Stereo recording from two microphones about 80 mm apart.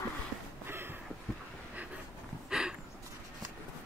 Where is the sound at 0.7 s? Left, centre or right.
Right.